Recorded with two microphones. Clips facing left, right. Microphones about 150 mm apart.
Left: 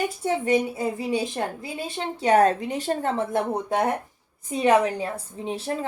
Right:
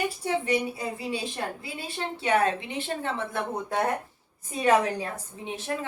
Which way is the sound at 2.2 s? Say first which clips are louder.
Left 6 dB; 40° left (ahead or behind).